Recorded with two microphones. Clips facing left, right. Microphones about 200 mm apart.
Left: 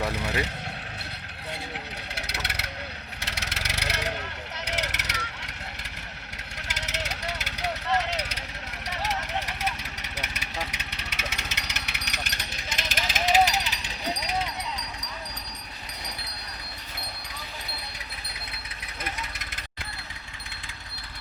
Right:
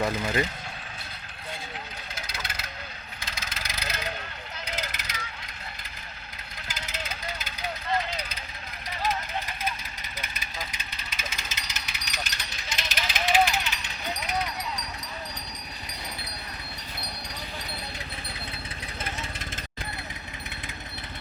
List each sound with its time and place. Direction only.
0.1 s vehicle: 70° left (ahead or behind)
2.1 s vehicle: 70° left (ahead or behind)
4.5 s a sound: 75° left (ahead or behind)
6.7 s vehicle: 75° left (ahead or behind); by 14.4 s 30° left (ahead or behind)